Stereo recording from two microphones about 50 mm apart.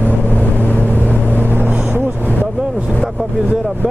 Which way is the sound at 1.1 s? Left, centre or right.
Left.